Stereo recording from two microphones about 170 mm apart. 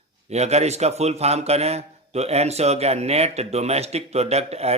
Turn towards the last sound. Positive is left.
turn(degrees=-40)  # may be behind; listen again after turning